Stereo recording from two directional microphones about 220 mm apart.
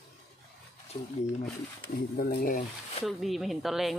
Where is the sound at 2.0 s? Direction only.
45° left (ahead or behind); by 3.1 s 25° left (ahead or behind).